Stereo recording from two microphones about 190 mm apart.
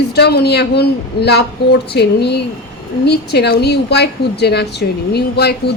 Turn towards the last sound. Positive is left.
turn(degrees=60)  # may be behind; listen again after turning